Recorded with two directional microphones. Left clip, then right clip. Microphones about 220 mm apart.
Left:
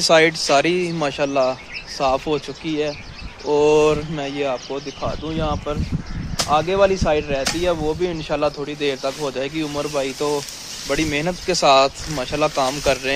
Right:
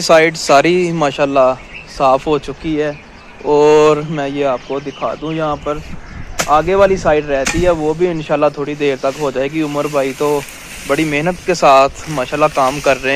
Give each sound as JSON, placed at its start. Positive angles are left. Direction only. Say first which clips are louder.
{"t": 0.0, "sound": "speech", "louder": "right 4 dB", "side_deg": -10}
{"t": 10.9, "sound": "speech", "louder": "right 6 dB", "side_deg": -5}